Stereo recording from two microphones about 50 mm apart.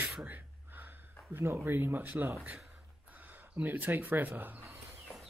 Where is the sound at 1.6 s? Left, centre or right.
Right.